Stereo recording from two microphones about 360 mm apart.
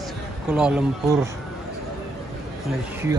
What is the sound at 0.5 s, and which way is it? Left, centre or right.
Speech, centre.